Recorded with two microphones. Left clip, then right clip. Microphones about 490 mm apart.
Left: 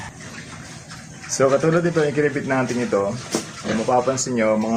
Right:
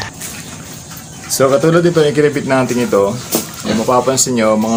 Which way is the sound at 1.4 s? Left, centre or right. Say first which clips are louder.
Right 6 dB; left.